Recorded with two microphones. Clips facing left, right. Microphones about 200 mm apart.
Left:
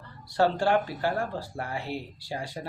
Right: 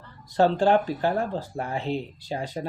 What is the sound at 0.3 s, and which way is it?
Speech, 20° right (ahead or behind).